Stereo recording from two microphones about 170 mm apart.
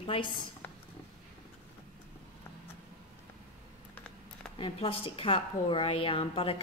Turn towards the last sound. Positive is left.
turn(degrees=35)  # may be behind; listen again after turning